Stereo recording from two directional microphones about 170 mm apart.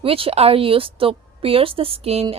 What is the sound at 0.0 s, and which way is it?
Speech, 35° right (ahead or behind).